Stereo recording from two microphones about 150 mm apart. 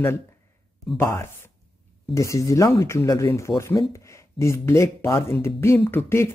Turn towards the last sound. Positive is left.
turn(degrees=15)  # may be behind; listen again after turning